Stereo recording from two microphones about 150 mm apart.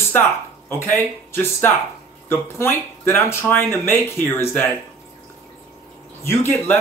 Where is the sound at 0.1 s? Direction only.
15° left (ahead or behind).